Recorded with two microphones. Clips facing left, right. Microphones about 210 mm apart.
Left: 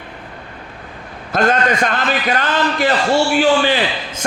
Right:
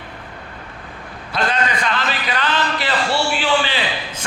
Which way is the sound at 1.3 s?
45° left (ahead or behind).